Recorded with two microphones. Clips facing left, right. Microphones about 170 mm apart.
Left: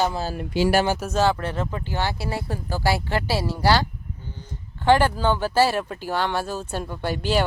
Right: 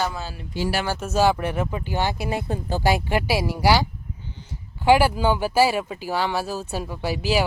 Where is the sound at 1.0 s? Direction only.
10° right (ahead or behind).